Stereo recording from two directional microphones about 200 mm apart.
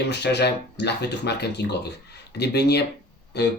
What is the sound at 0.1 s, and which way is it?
Speech, 55° left (ahead or behind).